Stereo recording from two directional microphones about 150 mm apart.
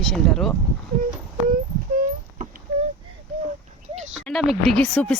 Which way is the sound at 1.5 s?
60° right (ahead or behind).